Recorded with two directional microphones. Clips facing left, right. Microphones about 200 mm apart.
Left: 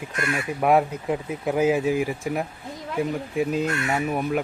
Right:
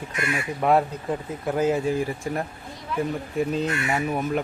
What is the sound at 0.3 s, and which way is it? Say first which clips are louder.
Speech: left 1 dB; 10° left (ahead or behind).